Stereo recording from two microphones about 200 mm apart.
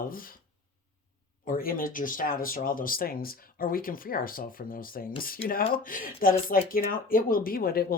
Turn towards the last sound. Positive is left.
turn(degrees=45)  # may be behind; listen again after turning